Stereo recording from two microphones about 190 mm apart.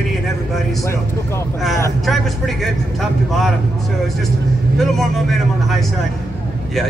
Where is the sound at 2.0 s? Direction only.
Centre (ahead or behind).